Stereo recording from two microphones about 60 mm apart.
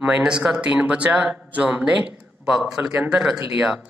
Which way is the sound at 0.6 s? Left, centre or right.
Right.